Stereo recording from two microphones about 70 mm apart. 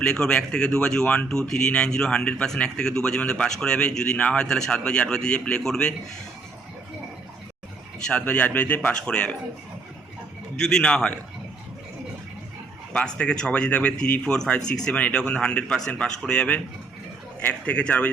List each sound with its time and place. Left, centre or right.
0.0 s speech: centre
8.2 s a man's voice: left
8.9 s speech: centre
10.7 s speech: centre
12.9 s a man's voice: centre